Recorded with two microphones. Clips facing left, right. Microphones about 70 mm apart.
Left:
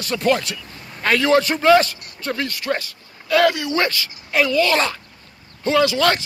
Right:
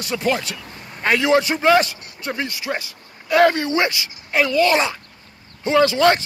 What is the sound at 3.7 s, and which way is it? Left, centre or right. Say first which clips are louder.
A man's voice: even; centre.